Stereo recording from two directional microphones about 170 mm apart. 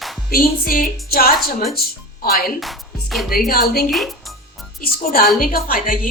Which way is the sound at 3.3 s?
60° left (ahead or behind).